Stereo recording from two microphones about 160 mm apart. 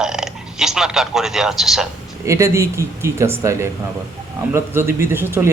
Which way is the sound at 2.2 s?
20° right (ahead or behind).